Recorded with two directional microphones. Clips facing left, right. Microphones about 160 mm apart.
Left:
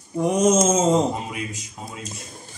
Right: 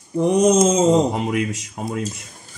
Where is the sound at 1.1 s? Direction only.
65° right (ahead or behind).